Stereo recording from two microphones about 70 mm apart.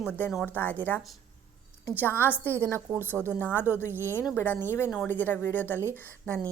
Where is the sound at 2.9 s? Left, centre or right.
Right.